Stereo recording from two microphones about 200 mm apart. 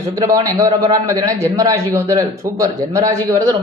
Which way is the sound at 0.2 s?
20° right (ahead or behind).